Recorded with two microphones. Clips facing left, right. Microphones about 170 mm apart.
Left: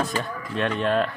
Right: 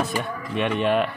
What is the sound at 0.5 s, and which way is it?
Speech, 15° right (ahead or behind).